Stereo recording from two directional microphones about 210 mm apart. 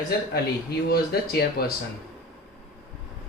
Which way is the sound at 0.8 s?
45° left (ahead or behind).